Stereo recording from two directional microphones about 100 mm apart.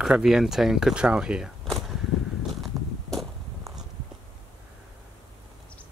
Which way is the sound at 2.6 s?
Centre (ahead or behind).